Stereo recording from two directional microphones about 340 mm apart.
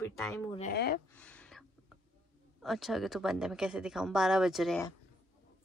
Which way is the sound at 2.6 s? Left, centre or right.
Centre.